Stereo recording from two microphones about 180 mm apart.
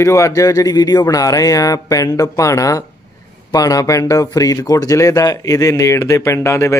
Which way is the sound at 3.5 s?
20° left (ahead or behind).